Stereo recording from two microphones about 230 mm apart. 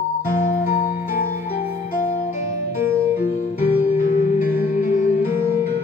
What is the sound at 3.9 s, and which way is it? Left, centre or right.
Music, left.